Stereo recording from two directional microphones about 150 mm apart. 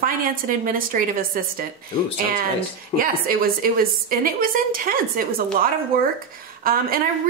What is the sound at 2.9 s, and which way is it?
A woman's voice, 70° right (ahead or behind).